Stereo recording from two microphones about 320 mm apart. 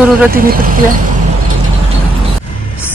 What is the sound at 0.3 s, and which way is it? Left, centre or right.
Speech, right.